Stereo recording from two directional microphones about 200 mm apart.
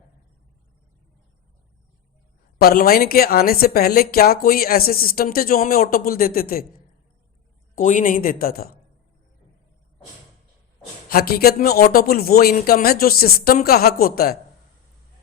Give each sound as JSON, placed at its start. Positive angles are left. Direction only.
{"t": 2.6, "sound": "a woman's voice", "side_deg": 50}
{"t": 7.8, "sound": "a woman's voice", "side_deg": 40}
{"t": 11.1, "sound": "a woman's voice", "side_deg": 50}